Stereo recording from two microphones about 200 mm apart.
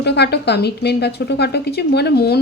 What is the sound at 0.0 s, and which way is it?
A woman's voice, 55° left (ahead or behind).